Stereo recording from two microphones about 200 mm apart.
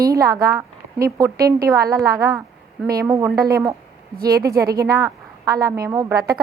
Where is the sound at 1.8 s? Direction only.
15° right (ahead or behind).